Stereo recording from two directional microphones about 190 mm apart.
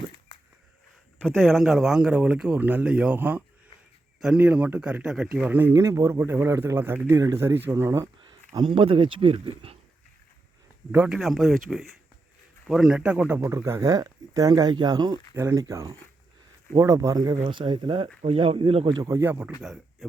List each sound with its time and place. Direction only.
1.2 s a man's voice: 5° left (ahead or behind); by 9.7 s 30° right (ahead or behind)
10.9 s a man's voice: 5° right (ahead or behind)